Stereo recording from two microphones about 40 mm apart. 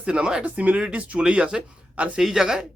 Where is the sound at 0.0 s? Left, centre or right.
Right.